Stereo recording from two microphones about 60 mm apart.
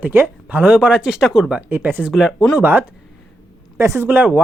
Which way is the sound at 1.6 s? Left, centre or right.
Right.